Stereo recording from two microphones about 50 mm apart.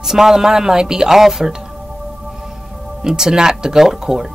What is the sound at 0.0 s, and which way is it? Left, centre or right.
Speech, centre.